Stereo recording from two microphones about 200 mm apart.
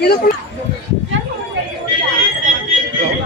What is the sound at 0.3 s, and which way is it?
Speech, 50° left (ahead or behind).